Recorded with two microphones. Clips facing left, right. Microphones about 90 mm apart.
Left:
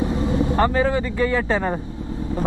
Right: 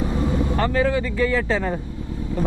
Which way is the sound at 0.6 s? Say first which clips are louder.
Left 1 dB; 25° left (ahead or behind).